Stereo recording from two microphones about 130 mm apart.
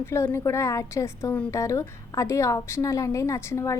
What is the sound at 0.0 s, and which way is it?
A woman's voice, 20° left (ahead or behind).